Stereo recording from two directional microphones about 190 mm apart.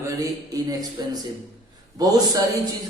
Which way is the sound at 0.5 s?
20° right (ahead or behind).